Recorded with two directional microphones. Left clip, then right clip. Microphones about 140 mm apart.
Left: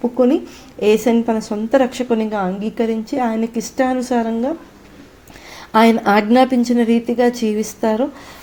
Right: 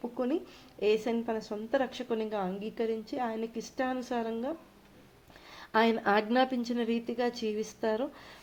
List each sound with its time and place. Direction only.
0.0 s a sound: 35° left (ahead or behind)
0.8 s speech: 35° left (ahead or behind); by 4.5 s 20° left (ahead or behind)
5.7 s speech: 25° left (ahead or behind)